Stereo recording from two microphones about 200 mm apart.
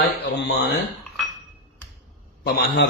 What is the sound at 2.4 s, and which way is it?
Speech, 55° left (ahead or behind).